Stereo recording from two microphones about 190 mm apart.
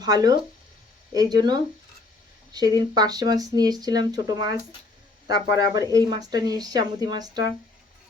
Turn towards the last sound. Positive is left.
turn(degrees=-20)  # may be behind; listen again after turning